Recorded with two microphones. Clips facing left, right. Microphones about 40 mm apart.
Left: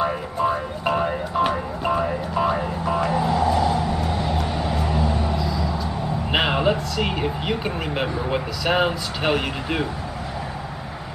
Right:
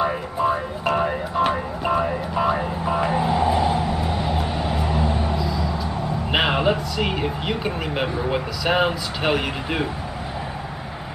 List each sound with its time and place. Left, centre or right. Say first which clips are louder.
0.0 s a sound: right 1 dB; centre
1.5 s vehicle: right 1 dB; centre
2.8 s vehicle: left 1 dB; centre
5.4 s music: even; centre
6.3 s speech: even; centre